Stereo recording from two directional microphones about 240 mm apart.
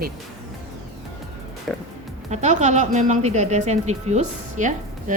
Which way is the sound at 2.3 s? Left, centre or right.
Right.